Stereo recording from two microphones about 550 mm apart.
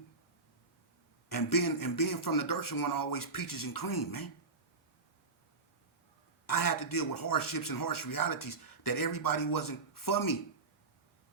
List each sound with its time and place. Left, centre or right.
1.3 s speech: left
6.5 s speech: left